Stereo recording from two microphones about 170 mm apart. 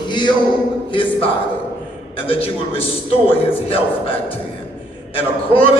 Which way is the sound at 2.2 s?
35° left (ahead or behind).